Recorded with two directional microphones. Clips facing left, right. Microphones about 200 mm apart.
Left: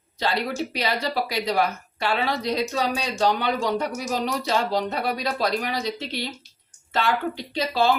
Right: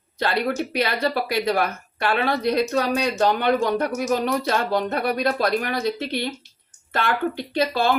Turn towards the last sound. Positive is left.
turn(degrees=-55)  # may be behind; listen again after turning